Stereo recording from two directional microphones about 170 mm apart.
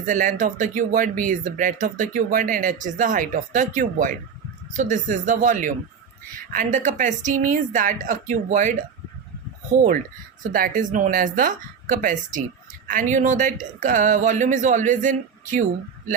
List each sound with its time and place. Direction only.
0.0 s speech: 50° right (ahead or behind)
10.5 s speech: 55° right (ahead or behind)